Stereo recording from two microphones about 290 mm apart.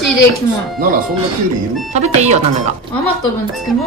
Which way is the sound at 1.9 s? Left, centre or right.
Right.